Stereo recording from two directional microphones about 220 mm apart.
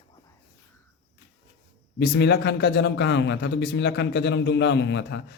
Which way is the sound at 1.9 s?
50° left (ahead or behind).